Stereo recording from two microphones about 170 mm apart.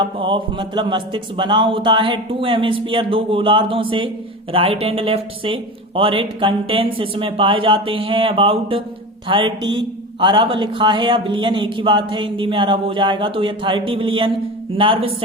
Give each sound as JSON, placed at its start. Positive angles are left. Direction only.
{"t": 0.0, "sound": "a man's voice", "side_deg": -30}